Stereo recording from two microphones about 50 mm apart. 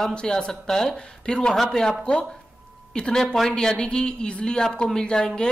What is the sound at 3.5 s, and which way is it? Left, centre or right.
A man's voice, centre.